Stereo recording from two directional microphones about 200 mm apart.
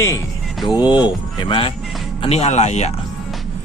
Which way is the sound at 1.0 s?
25° left (ahead or behind).